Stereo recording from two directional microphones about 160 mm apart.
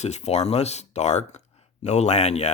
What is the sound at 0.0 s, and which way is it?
Speech, 45° left (ahead or behind).